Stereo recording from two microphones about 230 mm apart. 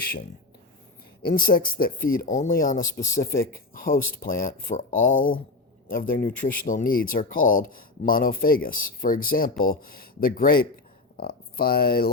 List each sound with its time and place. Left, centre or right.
1.2 s speech: left